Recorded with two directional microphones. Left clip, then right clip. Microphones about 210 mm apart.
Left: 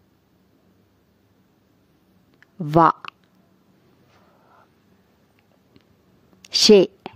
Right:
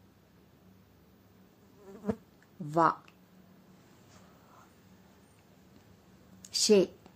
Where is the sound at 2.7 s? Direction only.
45° left (ahead or behind).